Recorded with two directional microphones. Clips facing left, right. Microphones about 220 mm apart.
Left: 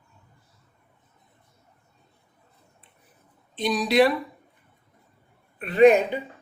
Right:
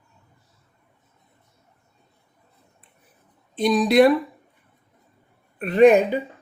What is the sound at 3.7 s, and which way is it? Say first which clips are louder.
Speech: right 4 dB; 50° right (ahead or behind).